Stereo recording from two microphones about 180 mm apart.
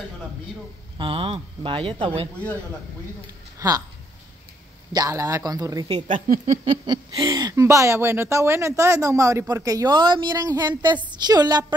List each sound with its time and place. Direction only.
0.9 s speech: 30° right (ahead or behind)
3.5 s speech: 20° right (ahead or behind)
4.9 s speech: 20° right (ahead or behind)
6.0 s speech: 45° right (ahead or behind)
6.9 s speech: 20° right (ahead or behind)